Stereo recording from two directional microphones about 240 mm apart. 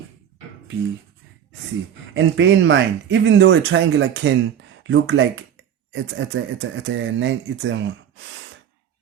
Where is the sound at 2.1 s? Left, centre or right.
Right.